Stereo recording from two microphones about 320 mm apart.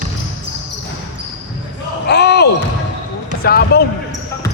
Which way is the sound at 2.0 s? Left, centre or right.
Left.